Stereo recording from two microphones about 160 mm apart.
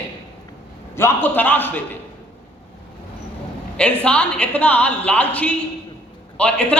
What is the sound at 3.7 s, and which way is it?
A woman's voice, 5° left (ahead or behind).